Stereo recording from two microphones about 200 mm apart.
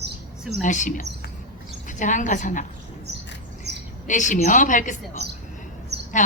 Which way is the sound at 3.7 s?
55° right (ahead or behind).